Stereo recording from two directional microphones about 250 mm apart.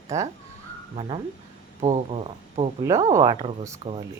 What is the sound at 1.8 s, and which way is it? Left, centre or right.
Speech, right.